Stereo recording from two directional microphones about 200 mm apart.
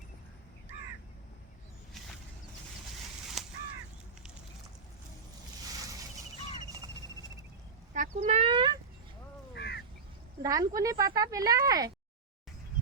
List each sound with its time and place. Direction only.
7.9 s a sound: 40° right (ahead or behind); by 8.7 s 25° right (ahead or behind)
9.6 s duck: 55° left (ahead or behind)
10.4 s speech: 20° right (ahead or behind)